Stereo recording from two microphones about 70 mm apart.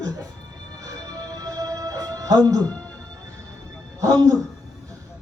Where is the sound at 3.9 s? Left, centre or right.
Right.